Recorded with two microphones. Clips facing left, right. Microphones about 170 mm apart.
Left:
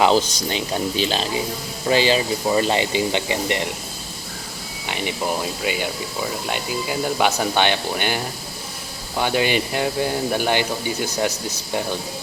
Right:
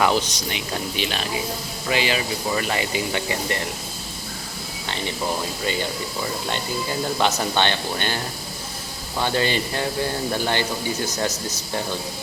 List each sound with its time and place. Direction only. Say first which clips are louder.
0.0 s speech: left 4 dB; 30° left (ahead or behind)
5.6 s speech: left 1 dB; 10° left (ahead or behind)